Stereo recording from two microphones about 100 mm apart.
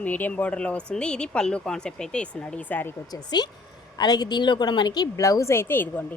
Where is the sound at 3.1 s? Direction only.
45° left (ahead or behind).